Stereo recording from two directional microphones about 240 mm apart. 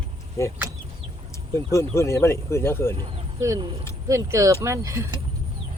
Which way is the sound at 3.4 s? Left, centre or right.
Centre.